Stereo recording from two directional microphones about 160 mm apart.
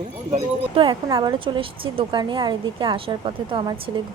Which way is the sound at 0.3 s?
35° right (ahead or behind).